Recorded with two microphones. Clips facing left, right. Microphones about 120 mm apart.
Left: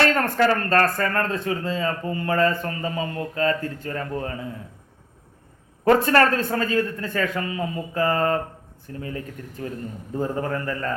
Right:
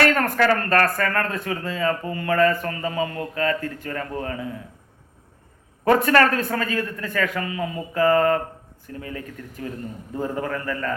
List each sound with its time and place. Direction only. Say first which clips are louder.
0.0 s speech: even; 30° left (ahead or behind)
6.0 s a man's voice: even; 30° left (ahead or behind)